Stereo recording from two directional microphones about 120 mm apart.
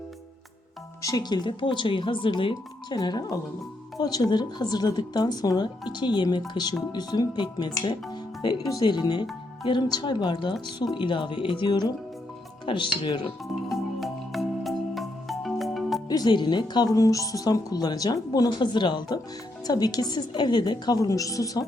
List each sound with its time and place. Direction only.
1.0 s speech: 35° left (ahead or behind)
2.9 s a woman's voice: 35° left (ahead or behind)
13.7 s music: centre (ahead or behind)
16.0 s a woman's voice: 35° left (ahead or behind)